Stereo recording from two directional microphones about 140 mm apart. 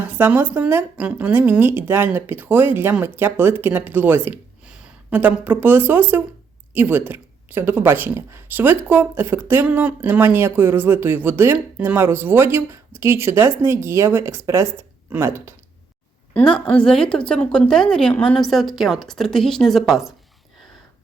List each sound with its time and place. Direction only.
0.0 s a sound: 15° right (ahead or behind)
0.5 s speech: 10° right (ahead or behind)
16.3 s a woman's voice: 5° left (ahead or behind)